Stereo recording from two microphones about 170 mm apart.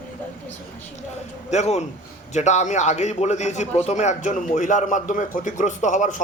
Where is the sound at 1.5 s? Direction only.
40° left (ahead or behind).